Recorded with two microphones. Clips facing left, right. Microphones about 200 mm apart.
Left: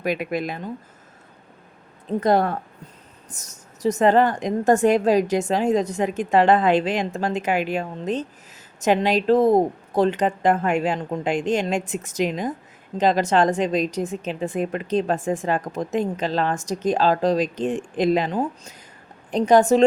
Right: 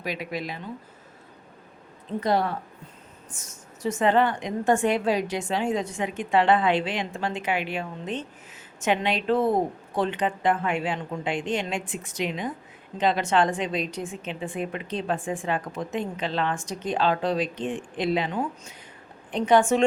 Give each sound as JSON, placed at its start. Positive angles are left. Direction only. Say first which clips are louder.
{"t": 0.0, "sound": "a woman's voice", "louder": "left 7 dB", "side_deg": 50}
{"t": 2.2, "sound": "a woman's voice", "louder": "left 5 dB", "side_deg": 50}